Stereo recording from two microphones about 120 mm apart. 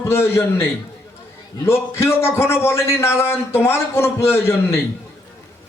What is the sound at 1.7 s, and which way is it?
A man's voice, 20° left (ahead or behind).